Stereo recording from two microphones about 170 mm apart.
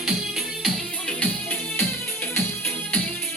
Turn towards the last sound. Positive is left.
turn(degrees=10)  # may be behind; listen again after turning